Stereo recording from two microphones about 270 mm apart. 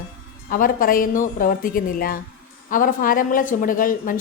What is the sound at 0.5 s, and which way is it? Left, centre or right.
A woman's voice, left.